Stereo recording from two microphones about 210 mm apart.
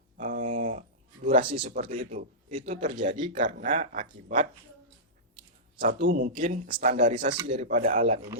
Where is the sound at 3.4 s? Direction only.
40° right (ahead or behind).